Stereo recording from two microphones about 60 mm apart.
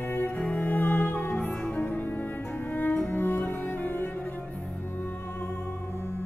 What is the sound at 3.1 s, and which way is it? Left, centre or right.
Music, left.